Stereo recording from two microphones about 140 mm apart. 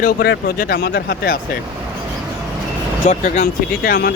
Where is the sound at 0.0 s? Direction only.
90° left.